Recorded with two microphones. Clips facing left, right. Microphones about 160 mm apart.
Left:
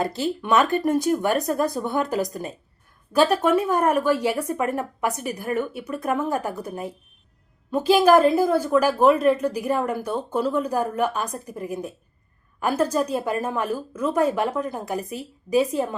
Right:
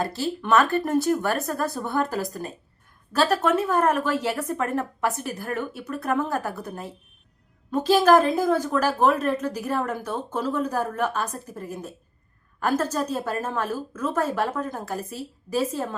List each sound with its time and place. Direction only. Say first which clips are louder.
0.0 s a woman's voice: left 2 dB; 15° left (ahead or behind)